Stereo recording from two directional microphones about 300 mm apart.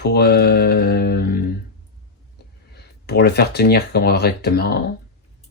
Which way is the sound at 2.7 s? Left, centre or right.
Left.